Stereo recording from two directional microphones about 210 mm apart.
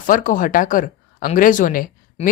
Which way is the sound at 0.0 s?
40° left (ahead or behind).